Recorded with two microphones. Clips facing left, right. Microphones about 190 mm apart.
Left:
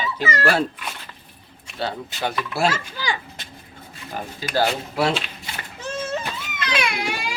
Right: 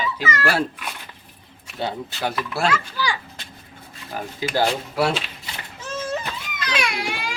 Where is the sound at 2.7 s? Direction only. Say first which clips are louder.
Right 2 dB; 20° left (ahead or behind).